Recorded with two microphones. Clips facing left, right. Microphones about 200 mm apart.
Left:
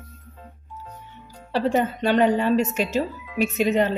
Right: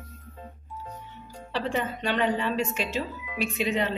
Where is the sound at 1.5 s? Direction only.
40° left (ahead or behind).